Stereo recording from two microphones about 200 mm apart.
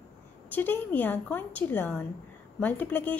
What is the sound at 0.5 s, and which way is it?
A woman's voice, 10° left (ahead or behind).